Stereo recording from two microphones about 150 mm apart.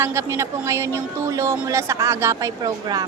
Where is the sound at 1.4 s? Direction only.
20° right (ahead or behind).